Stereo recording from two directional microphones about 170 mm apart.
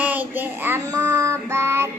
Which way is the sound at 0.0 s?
10° right (ahead or behind).